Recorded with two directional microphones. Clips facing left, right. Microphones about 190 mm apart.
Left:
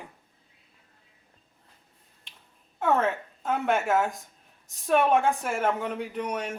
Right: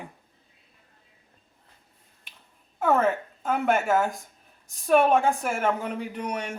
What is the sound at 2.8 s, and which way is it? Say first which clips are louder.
Speech: right 2 dB; centre (ahead or behind).